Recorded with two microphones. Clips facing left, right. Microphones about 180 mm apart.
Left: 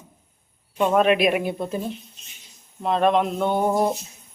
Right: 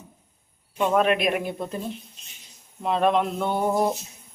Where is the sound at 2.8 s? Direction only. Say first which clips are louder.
Left 2 dB; 5° right (ahead or behind).